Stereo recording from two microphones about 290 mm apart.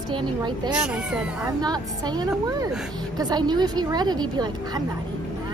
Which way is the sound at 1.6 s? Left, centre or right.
Centre.